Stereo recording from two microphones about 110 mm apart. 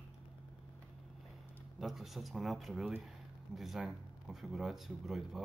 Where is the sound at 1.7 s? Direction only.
Centre (ahead or behind).